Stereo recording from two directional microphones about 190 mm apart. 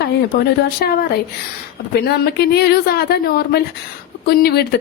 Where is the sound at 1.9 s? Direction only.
55° left (ahead or behind).